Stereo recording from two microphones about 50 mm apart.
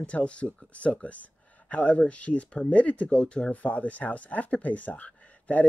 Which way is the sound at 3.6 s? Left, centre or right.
Left.